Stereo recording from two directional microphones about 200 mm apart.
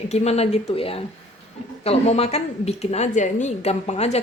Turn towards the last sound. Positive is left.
turn(degrees=30)  # may be behind; listen again after turning